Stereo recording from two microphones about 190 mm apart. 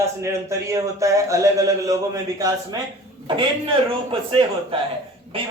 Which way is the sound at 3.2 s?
25° right (ahead or behind).